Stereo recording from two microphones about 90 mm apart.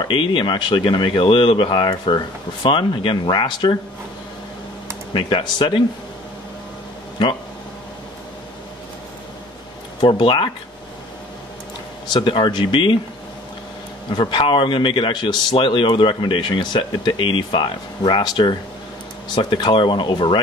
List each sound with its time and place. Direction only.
0.1 s a man's voice: 65° left (ahead or behind)
5.1 s speech: 60° left (ahead or behind)
9.9 s speech: 65° left (ahead or behind)
12.1 s a man's voice: 65° left (ahead or behind)
14.1 s a man's voice: 65° left (ahead or behind)